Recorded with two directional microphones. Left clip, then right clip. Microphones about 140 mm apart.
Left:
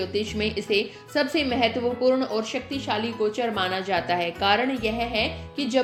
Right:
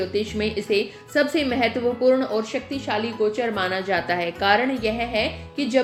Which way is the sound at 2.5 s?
20° left (ahead or behind).